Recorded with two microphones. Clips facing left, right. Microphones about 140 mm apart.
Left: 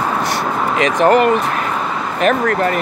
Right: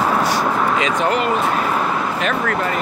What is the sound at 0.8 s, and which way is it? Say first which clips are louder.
Speech: left 6 dB; 55° left (ahead or behind).